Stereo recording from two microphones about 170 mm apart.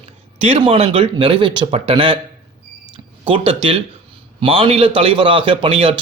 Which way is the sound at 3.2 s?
30° right (ahead or behind).